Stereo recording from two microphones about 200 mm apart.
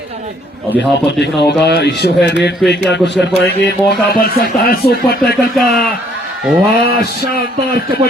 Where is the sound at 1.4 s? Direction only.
55° left (ahead or behind).